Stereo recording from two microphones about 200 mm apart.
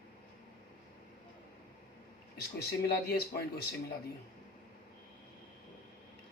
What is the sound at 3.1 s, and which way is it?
Speech, 55° left (ahead or behind).